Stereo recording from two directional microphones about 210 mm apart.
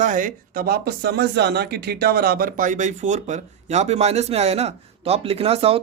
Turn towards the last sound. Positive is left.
turn(degrees=-30)  # may be behind; listen again after turning